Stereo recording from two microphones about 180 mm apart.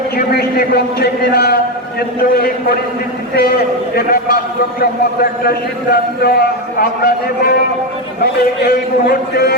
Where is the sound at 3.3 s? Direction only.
60° left (ahead or behind).